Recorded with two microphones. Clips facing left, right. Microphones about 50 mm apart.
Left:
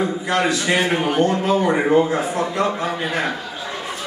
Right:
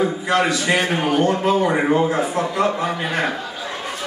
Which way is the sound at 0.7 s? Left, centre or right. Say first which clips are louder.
Left 1 dB; centre.